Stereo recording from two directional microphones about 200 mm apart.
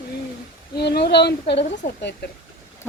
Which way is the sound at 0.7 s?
55° left (ahead or behind).